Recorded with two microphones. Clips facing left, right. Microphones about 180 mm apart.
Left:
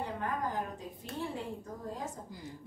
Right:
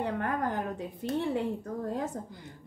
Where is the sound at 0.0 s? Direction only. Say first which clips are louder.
Right 5 dB; 65° right (ahead or behind).